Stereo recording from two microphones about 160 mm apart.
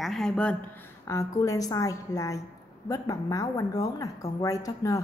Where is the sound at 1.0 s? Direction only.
20° left (ahead or behind).